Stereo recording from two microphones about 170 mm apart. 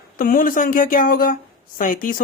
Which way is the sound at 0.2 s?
55° left (ahead or behind).